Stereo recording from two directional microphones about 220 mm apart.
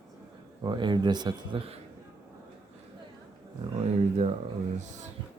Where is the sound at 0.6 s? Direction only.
20° right (ahead or behind).